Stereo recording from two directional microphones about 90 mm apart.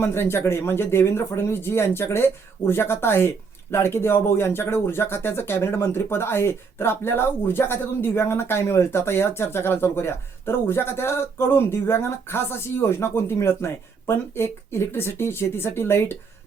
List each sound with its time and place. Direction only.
0.0 s speech: 25° left (ahead or behind)